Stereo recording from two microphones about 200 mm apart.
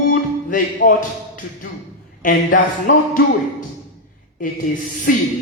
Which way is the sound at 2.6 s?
45° left (ahead or behind).